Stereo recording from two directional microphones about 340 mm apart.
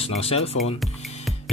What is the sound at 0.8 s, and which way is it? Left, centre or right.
Music, centre.